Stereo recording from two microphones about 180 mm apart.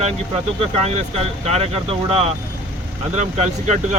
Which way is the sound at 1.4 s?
35° right (ahead or behind).